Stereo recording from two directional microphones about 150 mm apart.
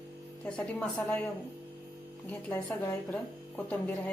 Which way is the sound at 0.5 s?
10° left (ahead or behind).